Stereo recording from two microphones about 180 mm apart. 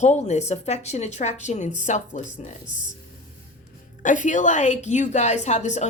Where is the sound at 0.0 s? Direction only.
40° left (ahead or behind).